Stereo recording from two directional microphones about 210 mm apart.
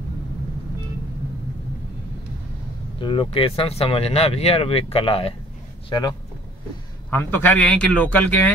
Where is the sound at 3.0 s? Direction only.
25° left (ahead or behind).